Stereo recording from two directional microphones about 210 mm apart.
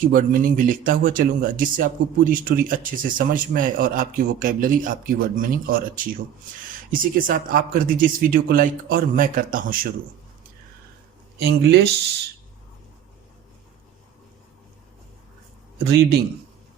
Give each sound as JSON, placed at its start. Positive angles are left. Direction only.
{"t": 0.0, "sound": "speech", "side_deg": -40}
{"t": 11.3, "sound": "speech", "side_deg": -50}